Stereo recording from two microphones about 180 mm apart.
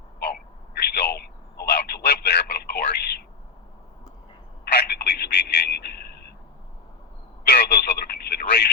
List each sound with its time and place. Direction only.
0.7 s telephone: 60° left (ahead or behind)
4.6 s telephone: 65° left (ahead or behind)
7.4 s telephone: 60° left (ahead or behind)